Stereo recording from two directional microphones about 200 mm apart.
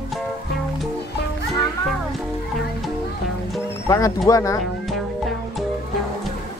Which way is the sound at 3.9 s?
15° left (ahead or behind).